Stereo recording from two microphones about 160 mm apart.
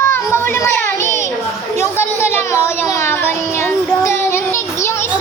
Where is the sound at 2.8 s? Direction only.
15° left (ahead or behind).